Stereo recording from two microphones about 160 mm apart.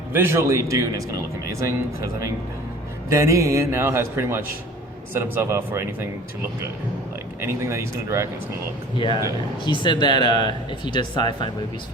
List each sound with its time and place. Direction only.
0.1 s a man's voice: 15° right (ahead or behind)
7.4 s a man's voice: 15° right (ahead or behind)
9.0 s speech: 30° left (ahead or behind)